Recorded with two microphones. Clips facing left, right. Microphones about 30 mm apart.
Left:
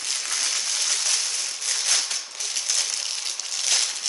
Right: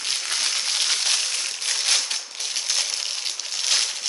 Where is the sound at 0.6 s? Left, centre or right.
Right.